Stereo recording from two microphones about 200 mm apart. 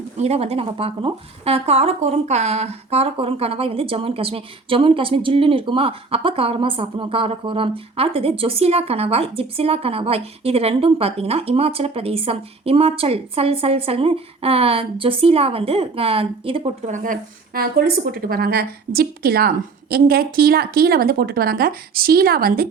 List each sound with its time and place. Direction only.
0.2 s speech: 30° right (ahead or behind)
16.9 s a woman's voice: 40° right (ahead or behind)